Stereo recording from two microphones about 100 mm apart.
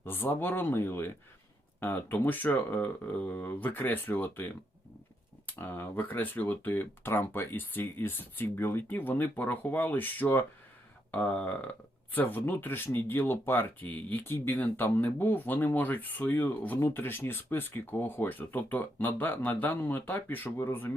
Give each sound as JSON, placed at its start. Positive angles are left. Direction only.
{"t": 0.0, "sound": "speech", "side_deg": 20}
{"t": 5.5, "sound": "speech", "side_deg": 20}
{"t": 11.1, "sound": "a sound", "side_deg": 15}
{"t": 12.1, "sound": "speech", "side_deg": 20}